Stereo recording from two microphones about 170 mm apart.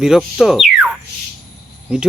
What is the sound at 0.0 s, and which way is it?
Speech, centre (ahead or behind).